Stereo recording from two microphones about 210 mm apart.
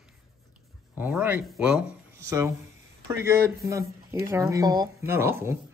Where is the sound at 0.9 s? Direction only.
10° right (ahead or behind).